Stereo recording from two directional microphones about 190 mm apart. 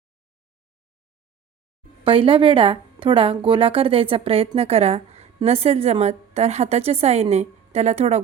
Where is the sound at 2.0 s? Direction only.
30° right (ahead or behind).